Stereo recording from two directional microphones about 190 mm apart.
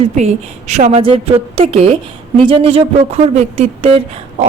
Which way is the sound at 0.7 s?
35° right (ahead or behind).